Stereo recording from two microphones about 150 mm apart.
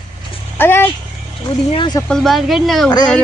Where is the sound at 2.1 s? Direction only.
Centre (ahead or behind).